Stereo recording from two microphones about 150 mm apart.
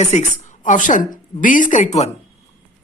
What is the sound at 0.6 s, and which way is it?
A woman's voice, 60° left (ahead or behind).